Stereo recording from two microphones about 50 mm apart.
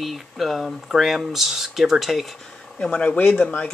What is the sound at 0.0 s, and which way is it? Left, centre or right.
Speech, centre.